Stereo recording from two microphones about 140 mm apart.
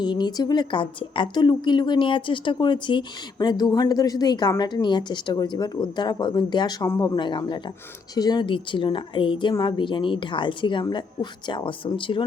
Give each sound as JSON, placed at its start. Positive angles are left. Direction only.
{"t": 0.0, "sound": "a woman's voice", "side_deg": 30}
{"t": 7.2, "sound": "a woman's voice", "side_deg": 35}